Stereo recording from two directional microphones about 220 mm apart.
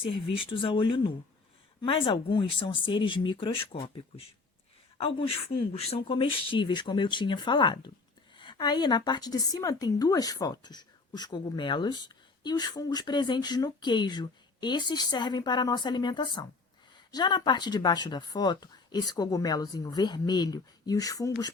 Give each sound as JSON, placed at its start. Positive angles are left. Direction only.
{"t": 0.3, "sound": "a woman's voice", "side_deg": 25}